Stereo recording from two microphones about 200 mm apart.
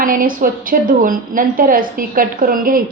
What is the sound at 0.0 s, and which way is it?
A woman's voice, 45° right (ahead or behind).